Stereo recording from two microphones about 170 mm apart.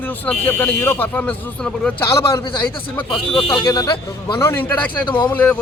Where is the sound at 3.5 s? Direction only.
20° left (ahead or behind).